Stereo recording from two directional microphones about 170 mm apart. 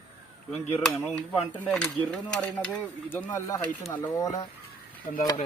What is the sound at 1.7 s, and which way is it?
Speech, 5° left (ahead or behind).